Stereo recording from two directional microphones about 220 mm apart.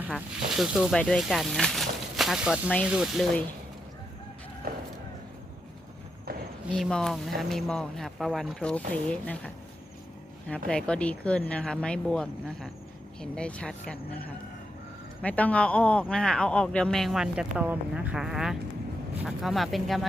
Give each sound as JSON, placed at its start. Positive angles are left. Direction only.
{"t": 0.0, "sound": "speech", "side_deg": 0}
{"t": 4.6, "sound": "a sound", "side_deg": -45}
{"t": 6.7, "sound": "speech", "side_deg": 0}
{"t": 10.7, "sound": "speech", "side_deg": 5}
{"t": 15.2, "sound": "speech", "side_deg": 5}